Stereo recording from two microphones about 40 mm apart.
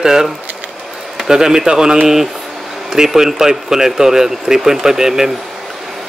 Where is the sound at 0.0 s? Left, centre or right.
Centre.